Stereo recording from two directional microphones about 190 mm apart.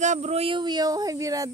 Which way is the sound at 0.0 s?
35° right (ahead or behind).